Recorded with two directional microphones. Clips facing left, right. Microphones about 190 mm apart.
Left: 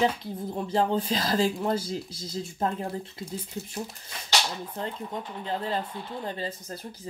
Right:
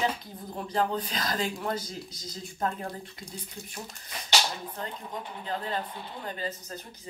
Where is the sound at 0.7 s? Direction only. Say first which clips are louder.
Left 4 dB; 25° left (ahead or behind).